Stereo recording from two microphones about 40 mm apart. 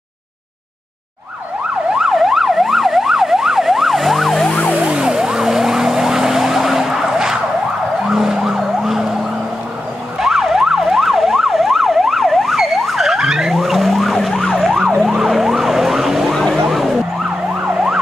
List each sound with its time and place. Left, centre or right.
1.9 s emergency vehicle: centre
4.7 s emergency vehicle: right; by 9.0 s centre
10.1 s emergency vehicle: centre
13.5 s emergency vehicle: centre
16.3 s emergency vehicle: centre
16.6 s emergency vehicle: centre
17.6 s emergency vehicle: centre